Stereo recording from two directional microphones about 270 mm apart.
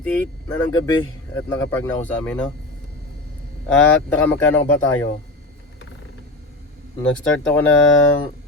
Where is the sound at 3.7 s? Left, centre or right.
Centre.